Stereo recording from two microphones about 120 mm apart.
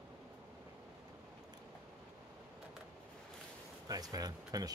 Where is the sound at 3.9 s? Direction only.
30° right (ahead or behind).